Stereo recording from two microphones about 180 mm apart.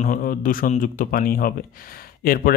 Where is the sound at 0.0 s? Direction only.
50° left (ahead or behind).